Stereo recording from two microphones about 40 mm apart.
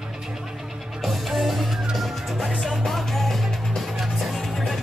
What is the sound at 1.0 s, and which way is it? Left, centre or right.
Music, centre.